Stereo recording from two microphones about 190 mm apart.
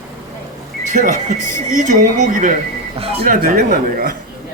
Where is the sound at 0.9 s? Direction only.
40° right (ahead or behind).